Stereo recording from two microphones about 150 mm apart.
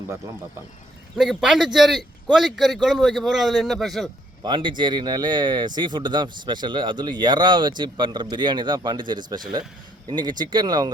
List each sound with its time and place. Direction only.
1.1 s a man's voice: centre (ahead or behind)
4.4 s speech: 30° right (ahead or behind)